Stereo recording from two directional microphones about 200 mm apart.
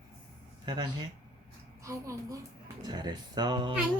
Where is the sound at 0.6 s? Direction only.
20° right (ahead or behind).